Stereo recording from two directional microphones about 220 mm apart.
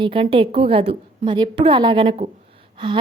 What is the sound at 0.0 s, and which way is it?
A woman's voice, 25° right (ahead or behind).